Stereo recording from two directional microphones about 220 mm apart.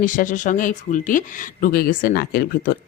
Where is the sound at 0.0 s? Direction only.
35° left (ahead or behind).